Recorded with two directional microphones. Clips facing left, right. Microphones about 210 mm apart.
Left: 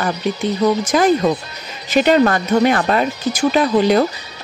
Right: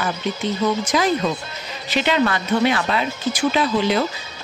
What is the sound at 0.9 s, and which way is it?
Music, 45° left (ahead or behind).